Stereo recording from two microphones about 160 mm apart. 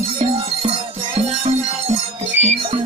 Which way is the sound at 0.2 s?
35° right (ahead or behind).